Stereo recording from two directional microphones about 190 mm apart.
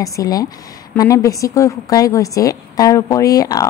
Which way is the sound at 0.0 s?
20° left (ahead or behind).